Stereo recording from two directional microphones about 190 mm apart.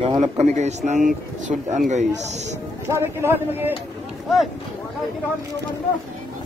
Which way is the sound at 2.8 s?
15° right (ahead or behind).